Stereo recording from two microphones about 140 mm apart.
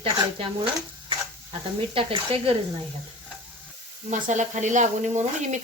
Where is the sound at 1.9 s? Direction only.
40° right (ahead or behind).